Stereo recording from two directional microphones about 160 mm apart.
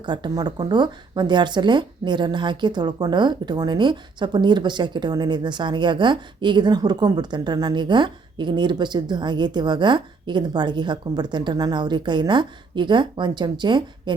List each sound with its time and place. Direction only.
0.0 s speech: 30° right (ahead or behind)